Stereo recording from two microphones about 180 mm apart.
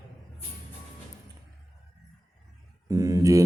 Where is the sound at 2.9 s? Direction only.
15° right (ahead or behind).